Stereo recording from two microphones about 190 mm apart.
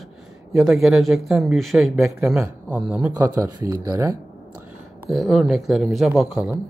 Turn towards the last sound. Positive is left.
turn(degrees=-5)  # may be behind; listen again after turning